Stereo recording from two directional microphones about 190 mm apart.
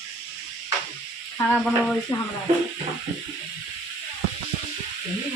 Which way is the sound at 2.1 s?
20° left (ahead or behind).